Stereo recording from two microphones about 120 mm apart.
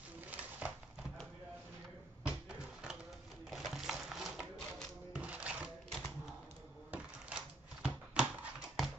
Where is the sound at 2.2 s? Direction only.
10° right (ahead or behind).